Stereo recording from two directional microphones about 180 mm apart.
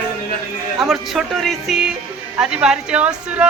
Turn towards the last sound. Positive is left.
turn(degrees=-5)  # may be behind; listen again after turning